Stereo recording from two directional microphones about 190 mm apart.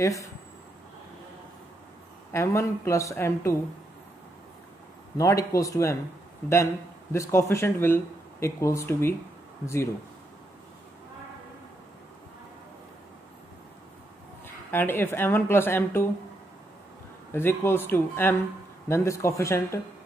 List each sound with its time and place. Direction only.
0.0 s speech: 15° left (ahead or behind)
2.3 s speech: 15° left (ahead or behind)
5.1 s speech: 15° left (ahead or behind)
14.7 s speech: 10° left (ahead or behind)
17.3 s speech: 10° left (ahead or behind)